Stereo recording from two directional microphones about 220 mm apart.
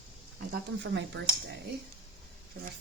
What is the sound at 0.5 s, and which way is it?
A woman's voice, 50° right (ahead or behind).